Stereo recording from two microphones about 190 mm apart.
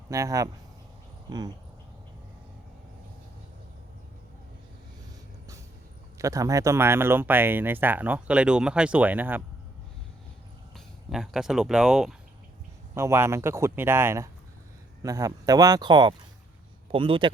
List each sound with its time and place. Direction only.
0.1 s speech: 15° right (ahead or behind)
6.1 s speech: 15° right (ahead or behind)
10.8 s speech: centre (ahead or behind)
12.9 s speech: 15° right (ahead or behind)